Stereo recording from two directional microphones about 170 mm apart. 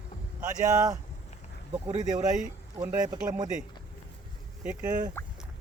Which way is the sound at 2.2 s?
45° right (ahead or behind).